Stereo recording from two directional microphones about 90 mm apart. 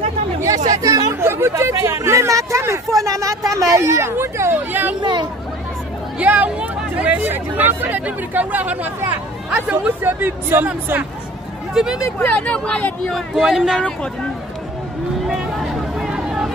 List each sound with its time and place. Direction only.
0.4 s chatter: 40° right (ahead or behind)
1.2 s a sound: 30° right (ahead or behind)
3.1 s speech: 40° right (ahead or behind); by 4.9 s 25° right (ahead or behind)
5.0 s speech: 60° right (ahead or behind)
6.1 s speech: 20° right (ahead or behind)
11.7 s speech: 5° right (ahead or behind)
12.3 s speech: 15° left (ahead or behind)
13.4 s speech: 5° right (ahead or behind)
15.2 s vehicle: 5° right (ahead or behind)